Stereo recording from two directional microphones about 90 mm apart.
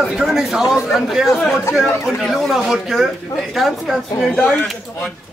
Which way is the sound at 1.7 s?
Centre (ahead or behind).